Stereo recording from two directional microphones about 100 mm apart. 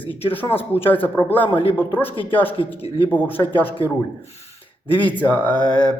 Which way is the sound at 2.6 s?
60° left (ahead or behind).